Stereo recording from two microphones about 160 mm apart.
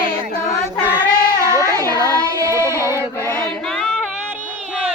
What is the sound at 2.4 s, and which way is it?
Child singing, 20° right (ahead or behind).